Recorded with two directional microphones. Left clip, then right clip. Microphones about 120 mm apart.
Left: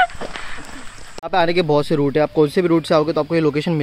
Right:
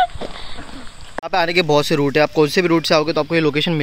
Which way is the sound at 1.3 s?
5° left (ahead or behind).